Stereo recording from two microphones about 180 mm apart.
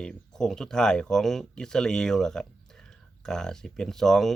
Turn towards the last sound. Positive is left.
turn(degrees=0)  # may be behind; listen again after turning